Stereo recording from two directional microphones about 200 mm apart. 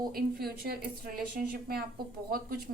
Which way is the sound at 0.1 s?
50° right (ahead or behind).